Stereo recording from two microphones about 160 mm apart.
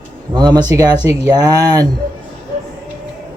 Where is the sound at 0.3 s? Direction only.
25° right (ahead or behind).